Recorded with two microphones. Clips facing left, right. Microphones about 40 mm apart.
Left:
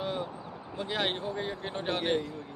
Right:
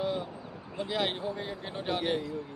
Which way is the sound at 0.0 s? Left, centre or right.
Centre.